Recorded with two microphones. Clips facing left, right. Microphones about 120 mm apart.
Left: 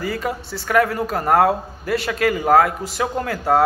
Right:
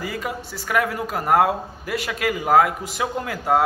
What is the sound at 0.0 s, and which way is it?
A man's voice, 10° right (ahead or behind).